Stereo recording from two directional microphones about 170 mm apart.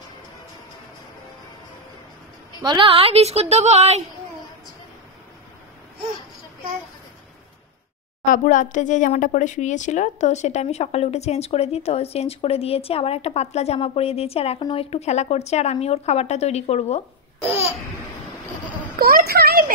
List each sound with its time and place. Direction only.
2.6 s a woman's voice: 30° right (ahead or behind)
8.3 s speech: 50° left (ahead or behind)
18.9 s a sound: 60° right (ahead or behind)